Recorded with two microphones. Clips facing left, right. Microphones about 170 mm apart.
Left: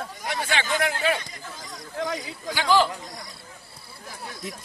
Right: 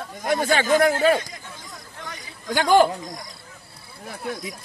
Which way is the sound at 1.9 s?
90° left.